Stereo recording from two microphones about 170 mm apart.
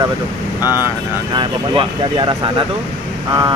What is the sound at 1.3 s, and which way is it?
Speech, 30° right (ahead or behind).